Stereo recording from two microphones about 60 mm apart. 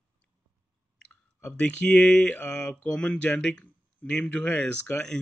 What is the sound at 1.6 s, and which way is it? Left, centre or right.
Speech, centre.